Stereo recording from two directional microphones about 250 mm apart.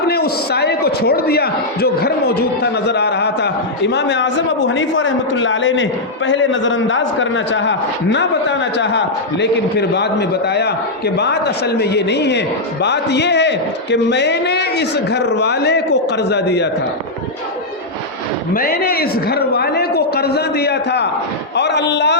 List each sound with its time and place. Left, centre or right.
0.1 s a man's voice: left
18.5 s a man's voice: left